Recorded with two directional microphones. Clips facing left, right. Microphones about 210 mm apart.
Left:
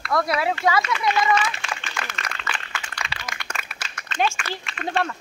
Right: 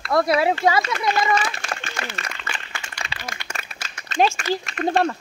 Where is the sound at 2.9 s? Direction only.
35° right (ahead or behind).